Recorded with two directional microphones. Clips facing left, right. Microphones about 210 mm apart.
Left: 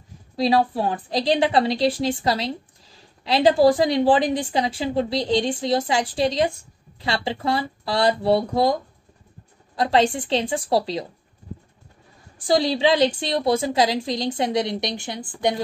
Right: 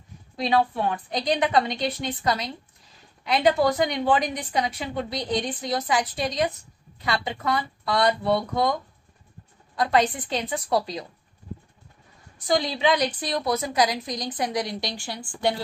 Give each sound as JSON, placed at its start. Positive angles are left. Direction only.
{"t": 0.4, "sound": "a woman's voice", "side_deg": 35}
{"t": 9.8, "sound": "a woman's voice", "side_deg": 30}
{"t": 12.4, "sound": "a woman's voice", "side_deg": 30}